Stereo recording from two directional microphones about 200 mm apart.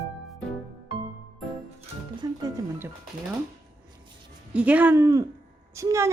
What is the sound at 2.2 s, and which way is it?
Speech, 20° right (ahead or behind).